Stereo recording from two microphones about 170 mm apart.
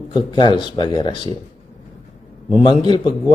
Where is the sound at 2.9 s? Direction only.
25° left (ahead or behind).